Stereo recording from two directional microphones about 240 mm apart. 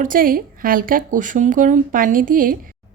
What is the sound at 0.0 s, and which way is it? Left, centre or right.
A woman's voice, right.